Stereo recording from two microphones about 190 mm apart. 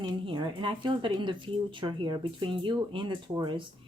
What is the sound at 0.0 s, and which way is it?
Speech, 25° right (ahead or behind).